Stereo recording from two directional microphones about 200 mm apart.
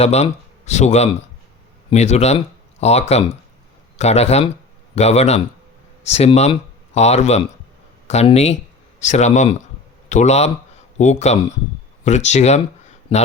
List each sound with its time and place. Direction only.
0.0 s speech: 35° left (ahead or behind)